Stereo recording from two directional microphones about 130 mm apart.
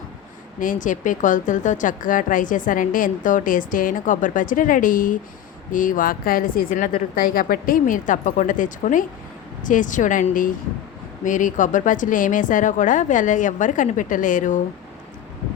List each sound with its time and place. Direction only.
0.6 s a woman's voice: 85° left